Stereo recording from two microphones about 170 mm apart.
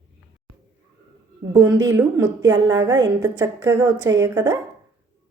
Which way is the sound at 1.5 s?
20° right (ahead or behind).